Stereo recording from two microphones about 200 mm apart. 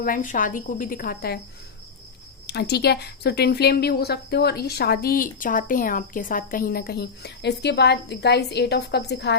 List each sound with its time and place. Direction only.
0.0 s speech: 45° left (ahead or behind)
2.5 s speech: 55° left (ahead or behind)